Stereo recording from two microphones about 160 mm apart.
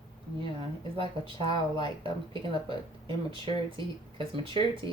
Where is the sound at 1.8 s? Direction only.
35° right (ahead or behind).